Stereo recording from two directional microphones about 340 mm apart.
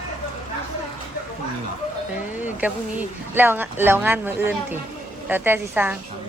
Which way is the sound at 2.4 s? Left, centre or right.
Centre.